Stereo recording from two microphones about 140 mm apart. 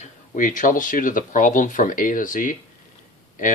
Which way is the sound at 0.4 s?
70° left (ahead or behind).